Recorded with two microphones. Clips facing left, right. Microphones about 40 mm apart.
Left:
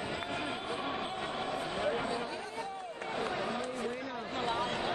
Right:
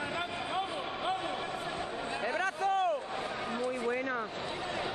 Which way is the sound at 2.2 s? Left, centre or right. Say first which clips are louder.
Right 6 dB; right.